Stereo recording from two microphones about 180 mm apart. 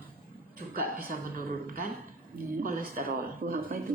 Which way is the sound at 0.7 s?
55° right (ahead or behind).